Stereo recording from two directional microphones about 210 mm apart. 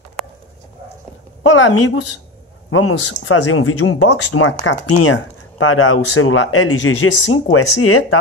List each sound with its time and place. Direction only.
1.5 s a woman's voice: 65° left (ahead or behind)
2.7 s speech: 80° left